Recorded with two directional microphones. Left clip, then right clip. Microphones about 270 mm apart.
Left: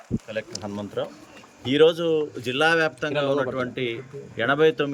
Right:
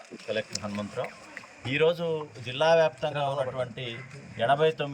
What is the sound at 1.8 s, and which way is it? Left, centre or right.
Speech, centre.